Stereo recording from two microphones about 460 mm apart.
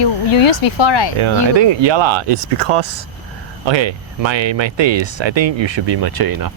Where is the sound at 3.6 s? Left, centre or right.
Right.